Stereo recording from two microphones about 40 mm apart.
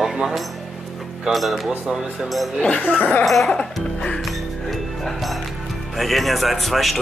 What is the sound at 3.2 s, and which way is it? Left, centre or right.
Speech, centre.